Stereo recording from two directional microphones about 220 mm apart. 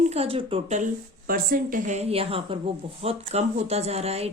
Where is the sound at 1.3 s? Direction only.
40° right (ahead or behind).